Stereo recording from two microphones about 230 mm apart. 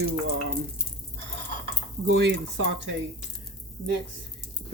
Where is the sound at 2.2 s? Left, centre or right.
Right.